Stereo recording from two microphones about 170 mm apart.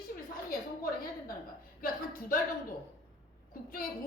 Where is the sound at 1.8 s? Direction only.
60° left (ahead or behind).